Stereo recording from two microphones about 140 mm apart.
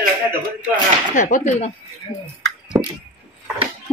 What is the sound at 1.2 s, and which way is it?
Speech, 65° left (ahead or behind).